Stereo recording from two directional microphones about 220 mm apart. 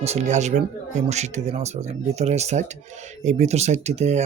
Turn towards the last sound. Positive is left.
turn(degrees=-30)  # may be behind; listen again after turning